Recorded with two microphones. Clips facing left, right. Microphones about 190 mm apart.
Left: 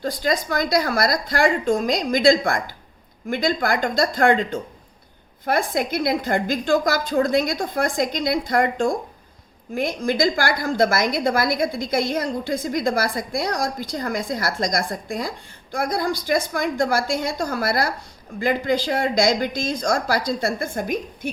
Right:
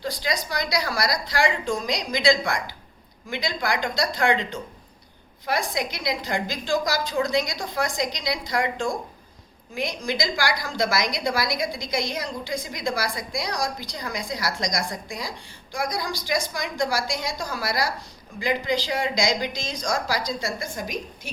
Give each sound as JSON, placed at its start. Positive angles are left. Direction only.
{"t": 0.0, "sound": "a woman's voice", "side_deg": 50}